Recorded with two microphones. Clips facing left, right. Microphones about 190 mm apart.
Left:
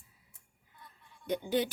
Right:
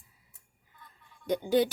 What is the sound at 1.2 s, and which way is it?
Speech, 40° right (ahead or behind).